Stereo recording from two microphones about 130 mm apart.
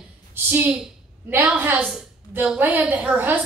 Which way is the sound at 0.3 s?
15° right (ahead or behind).